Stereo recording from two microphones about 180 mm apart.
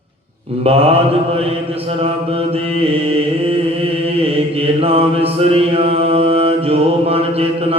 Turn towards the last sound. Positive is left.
turn(degrees=-35)  # may be behind; listen again after turning